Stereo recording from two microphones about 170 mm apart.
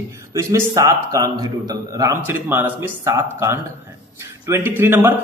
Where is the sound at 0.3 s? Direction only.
15° right (ahead or behind).